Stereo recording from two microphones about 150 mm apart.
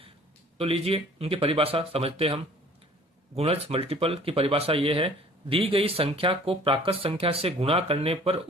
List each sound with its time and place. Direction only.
0.6 s speech: 40° right (ahead or behind)